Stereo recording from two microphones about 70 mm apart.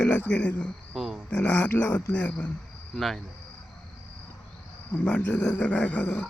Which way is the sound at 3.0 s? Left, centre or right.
Centre.